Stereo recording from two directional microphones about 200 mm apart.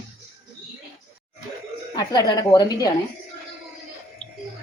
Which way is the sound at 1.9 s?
20° left (ahead or behind).